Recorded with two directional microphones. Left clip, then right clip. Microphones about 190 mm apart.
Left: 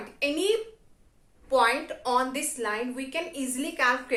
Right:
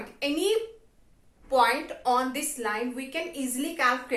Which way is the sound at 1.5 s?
20° left (ahead or behind).